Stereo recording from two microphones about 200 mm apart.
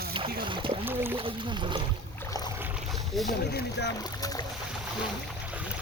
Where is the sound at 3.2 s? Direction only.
50° left (ahead or behind).